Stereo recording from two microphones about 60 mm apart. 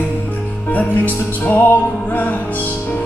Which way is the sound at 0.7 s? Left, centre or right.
Left.